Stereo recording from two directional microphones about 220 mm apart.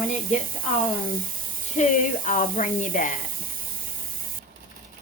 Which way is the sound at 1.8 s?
30° left (ahead or behind).